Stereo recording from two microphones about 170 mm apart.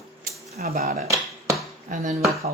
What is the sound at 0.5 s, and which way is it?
Speech, 65° right (ahead or behind).